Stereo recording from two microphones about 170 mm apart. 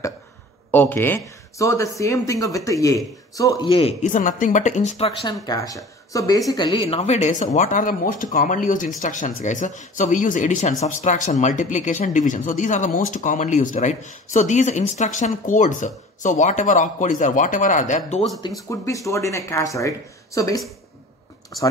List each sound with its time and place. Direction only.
0.7 s speech: 10° left (ahead or behind); by 3.9 s 25° left (ahead or behind)
4.0 s speech: 50° left (ahead or behind)
5.5 s speech: 20° left (ahead or behind)
7.0 s speech: 45° left (ahead or behind)
18.7 s speech: 20° left (ahead or behind)